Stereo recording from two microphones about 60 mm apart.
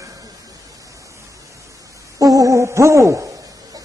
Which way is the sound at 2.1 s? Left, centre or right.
Right.